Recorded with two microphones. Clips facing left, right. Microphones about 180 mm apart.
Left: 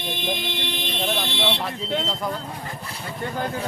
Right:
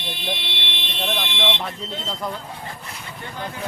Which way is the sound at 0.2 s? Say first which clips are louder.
Left 3 dB; 45° left (ahead or behind).